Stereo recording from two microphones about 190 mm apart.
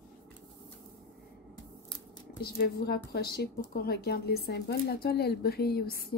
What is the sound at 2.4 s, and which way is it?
Speech, 55° left (ahead or behind).